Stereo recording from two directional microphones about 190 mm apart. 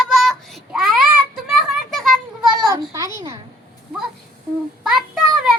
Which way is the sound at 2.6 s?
20° right (ahead or behind).